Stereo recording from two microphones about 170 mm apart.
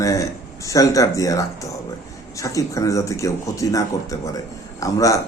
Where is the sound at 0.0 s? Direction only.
20° left (ahead or behind).